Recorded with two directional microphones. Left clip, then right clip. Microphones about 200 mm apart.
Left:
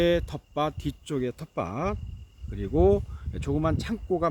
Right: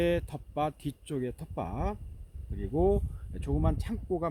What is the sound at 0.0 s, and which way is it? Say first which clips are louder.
Speech: left 5 dB; 10° left (ahead or behind).